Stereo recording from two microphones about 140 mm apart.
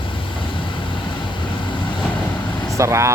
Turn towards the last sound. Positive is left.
turn(degrees=-20)  # may be behind; listen again after turning